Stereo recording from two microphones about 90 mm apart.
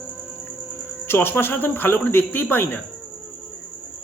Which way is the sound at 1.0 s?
25° left (ahead or behind).